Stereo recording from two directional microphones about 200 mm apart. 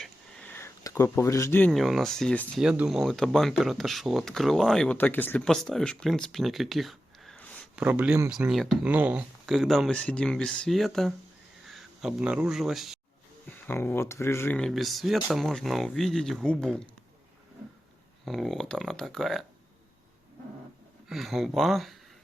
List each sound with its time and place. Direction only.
0.0 s speech: 5° left (ahead or behind)
7.8 s speech: 5° right (ahead or behind)
13.7 s speech: 10° left (ahead or behind)
18.3 s speech: centre (ahead or behind)
21.1 s speech: centre (ahead or behind)